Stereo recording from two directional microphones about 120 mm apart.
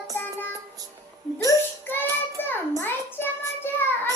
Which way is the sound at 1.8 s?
15° left (ahead or behind).